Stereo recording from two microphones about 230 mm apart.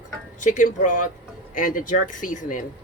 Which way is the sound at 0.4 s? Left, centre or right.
Left.